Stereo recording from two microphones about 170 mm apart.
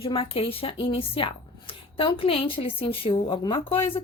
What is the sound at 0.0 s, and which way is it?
A woman's voice, 35° left (ahead or behind).